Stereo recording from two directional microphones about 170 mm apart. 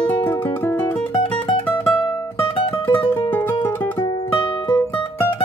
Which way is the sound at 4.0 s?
25° left (ahead or behind).